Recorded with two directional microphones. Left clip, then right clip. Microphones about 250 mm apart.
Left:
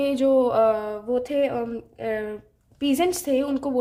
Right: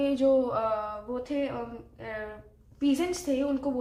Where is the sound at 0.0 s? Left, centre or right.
Left.